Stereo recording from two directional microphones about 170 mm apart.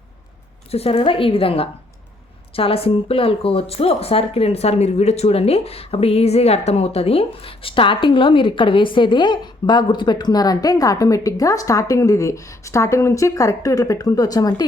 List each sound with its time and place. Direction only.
0.7 s a woman's voice: 35° left (ahead or behind)